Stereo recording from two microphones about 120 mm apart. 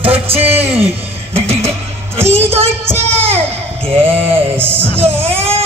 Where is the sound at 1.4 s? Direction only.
60° right (ahead or behind).